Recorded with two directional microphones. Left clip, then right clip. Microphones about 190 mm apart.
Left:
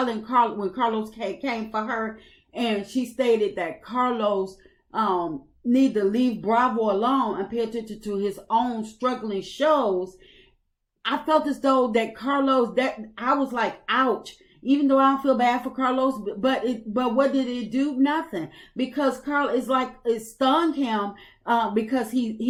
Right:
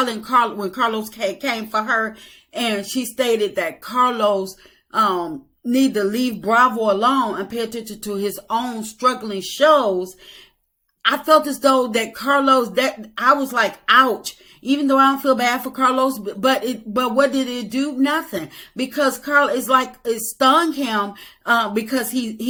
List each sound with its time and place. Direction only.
0.0 s speech: 15° right (ahead or behind)